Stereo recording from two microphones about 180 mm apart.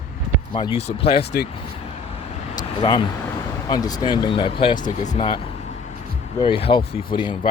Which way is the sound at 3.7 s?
20° left (ahead or behind).